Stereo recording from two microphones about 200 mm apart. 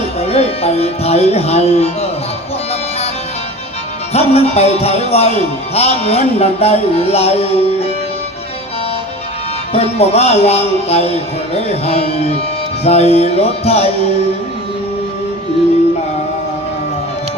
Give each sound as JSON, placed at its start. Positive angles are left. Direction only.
{"t": 0.3, "sound": "speech", "side_deg": 30}
{"t": 4.1, "sound": "speech", "side_deg": 30}
{"t": 9.7, "sound": "speech", "side_deg": 30}